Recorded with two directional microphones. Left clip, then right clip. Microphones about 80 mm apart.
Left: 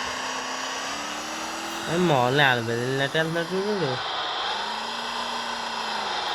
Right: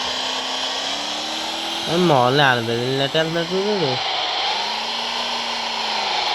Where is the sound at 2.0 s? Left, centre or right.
Right.